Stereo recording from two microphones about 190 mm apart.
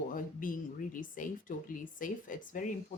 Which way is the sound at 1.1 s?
45° left (ahead or behind).